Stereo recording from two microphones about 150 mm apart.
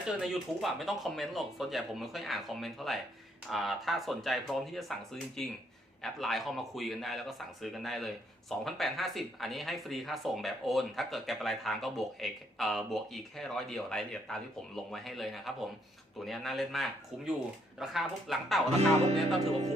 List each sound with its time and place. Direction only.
0.2 s a man's voice: centre (ahead or behind)
19.4 s music: 45° right (ahead or behind)